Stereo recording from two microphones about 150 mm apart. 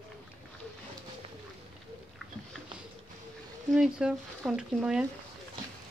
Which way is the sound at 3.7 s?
5° right (ahead or behind).